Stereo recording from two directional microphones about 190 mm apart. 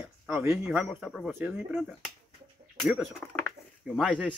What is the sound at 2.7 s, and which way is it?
Speech, centre (ahead or behind).